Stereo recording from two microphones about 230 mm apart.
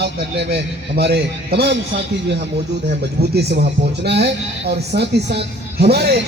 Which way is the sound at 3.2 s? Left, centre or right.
Right.